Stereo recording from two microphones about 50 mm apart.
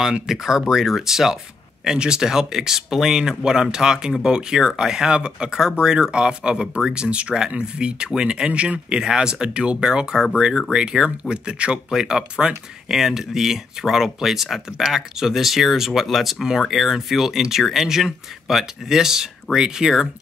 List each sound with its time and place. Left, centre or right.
0.1 s speech: centre